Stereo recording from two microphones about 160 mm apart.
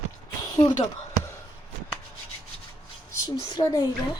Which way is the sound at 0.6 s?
15° left (ahead or behind).